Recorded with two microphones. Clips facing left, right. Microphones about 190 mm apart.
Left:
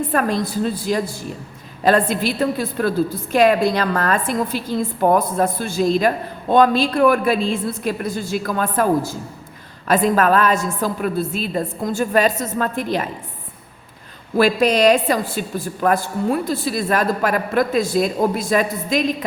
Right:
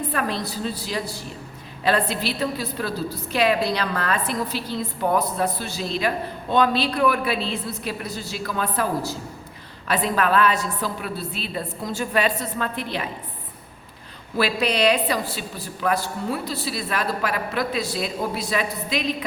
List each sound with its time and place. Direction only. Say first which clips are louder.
0.0 s a woman's voice: left 6 dB; 45° left (ahead or behind)
14.3 s a woman's voice: left 7 dB; 45° left (ahead or behind)